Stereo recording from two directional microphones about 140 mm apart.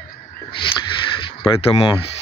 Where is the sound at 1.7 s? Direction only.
45° left (ahead or behind).